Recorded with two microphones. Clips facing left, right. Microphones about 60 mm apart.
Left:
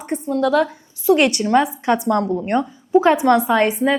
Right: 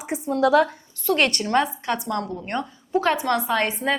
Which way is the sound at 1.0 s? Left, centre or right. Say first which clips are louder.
Left 6 dB; centre.